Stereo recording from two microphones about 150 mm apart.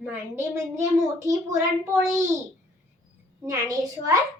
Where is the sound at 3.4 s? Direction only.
25° right (ahead or behind).